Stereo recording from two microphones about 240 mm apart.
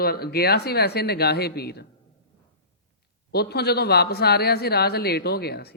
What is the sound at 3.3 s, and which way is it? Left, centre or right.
Speech, left.